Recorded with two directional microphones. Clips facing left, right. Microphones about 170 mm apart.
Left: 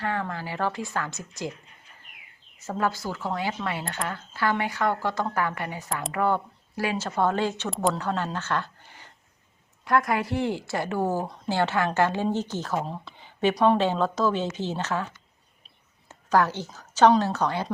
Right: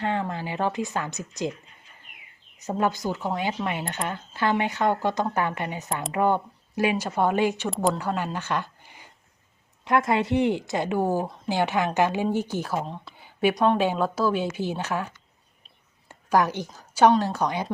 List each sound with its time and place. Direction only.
0.0 s speech: 20° right (ahead or behind)
2.6 s speech: 20° right (ahead or behind)
12.8 s speech: centre (ahead or behind)
13.1 s a sound: 10° right (ahead or behind)
13.7 s speech: 10° right (ahead or behind)
16.0 s a sound: 15° right (ahead or behind)
17.2 s speech: 15° right (ahead or behind)